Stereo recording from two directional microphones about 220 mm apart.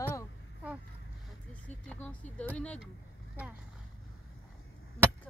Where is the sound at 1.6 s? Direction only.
5° left (ahead or behind).